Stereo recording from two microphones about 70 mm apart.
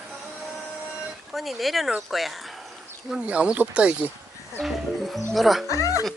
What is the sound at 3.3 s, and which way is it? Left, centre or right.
Speech, centre.